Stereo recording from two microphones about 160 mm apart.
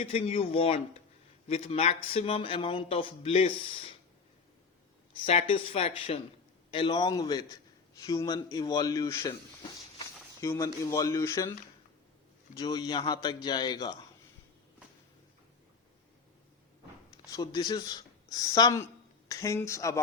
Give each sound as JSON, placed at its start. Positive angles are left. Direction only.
{"t": 0.0, "sound": "speech", "side_deg": 40}
{"t": 5.2, "sound": "speech", "side_deg": 40}
{"t": 12.5, "sound": "speech", "side_deg": 25}
{"t": 17.1, "sound": "speech", "side_deg": 20}